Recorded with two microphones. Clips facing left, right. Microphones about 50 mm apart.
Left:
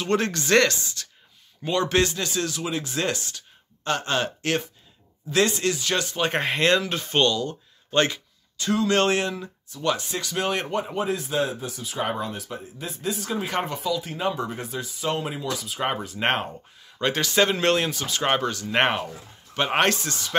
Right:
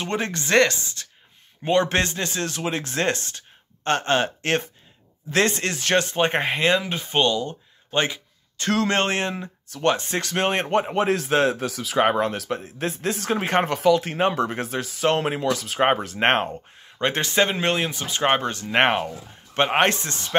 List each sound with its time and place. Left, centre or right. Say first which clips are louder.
0.1 s speech: left 1 dB; right
8.8 s speech: left 5 dB; right
10.7 s speech: right 5 dB; right
13.7 s speech: right 8 dB; right
16.2 s speech: right 4 dB; right
19.6 s speech: right 2 dB; right